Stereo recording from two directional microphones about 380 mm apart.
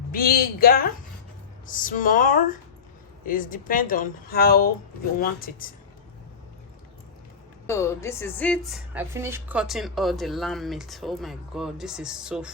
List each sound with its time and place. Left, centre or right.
0.1 s speech: left
7.7 s speech: centre